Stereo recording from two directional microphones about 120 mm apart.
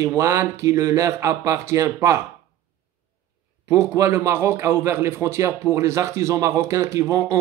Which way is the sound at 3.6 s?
25° right (ahead or behind).